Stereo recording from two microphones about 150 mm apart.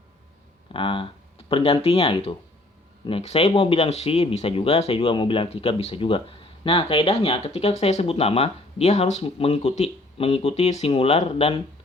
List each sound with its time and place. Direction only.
0.7 s speech: 35° left (ahead or behind)